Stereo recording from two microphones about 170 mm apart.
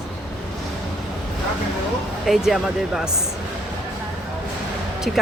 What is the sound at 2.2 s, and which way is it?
Speech, centre (ahead or behind).